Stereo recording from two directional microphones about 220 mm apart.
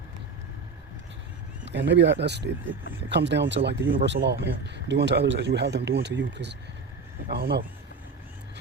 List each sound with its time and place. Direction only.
1.6 s speech: 50° right (ahead or behind)